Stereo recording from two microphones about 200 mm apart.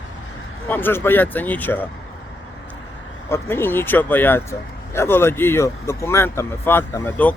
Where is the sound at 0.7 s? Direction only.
10° left (ahead or behind).